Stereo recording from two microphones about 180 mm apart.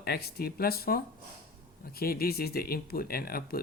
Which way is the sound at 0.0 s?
60° left (ahead or behind).